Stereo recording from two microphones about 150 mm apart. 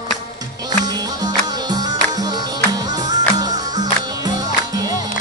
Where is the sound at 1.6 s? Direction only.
25° right (ahead or behind).